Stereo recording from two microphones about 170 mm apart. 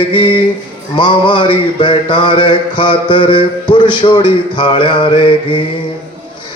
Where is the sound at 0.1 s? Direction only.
30° left (ahead or behind).